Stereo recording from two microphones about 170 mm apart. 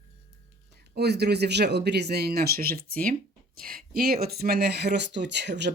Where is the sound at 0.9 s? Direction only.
75° right (ahead or behind).